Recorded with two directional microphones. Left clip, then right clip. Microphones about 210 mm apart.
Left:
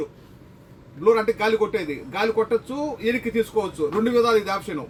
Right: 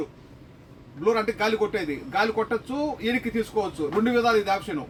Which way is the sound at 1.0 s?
15° right (ahead or behind).